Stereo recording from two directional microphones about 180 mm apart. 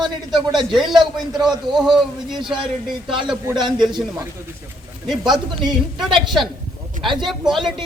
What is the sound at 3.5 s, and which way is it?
Speech, 25° right (ahead or behind).